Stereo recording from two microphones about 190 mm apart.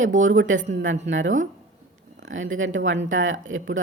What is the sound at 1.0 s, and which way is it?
A woman's voice, 85° right.